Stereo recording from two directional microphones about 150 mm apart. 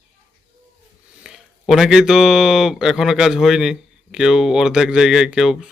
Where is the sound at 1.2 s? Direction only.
5° right (ahead or behind).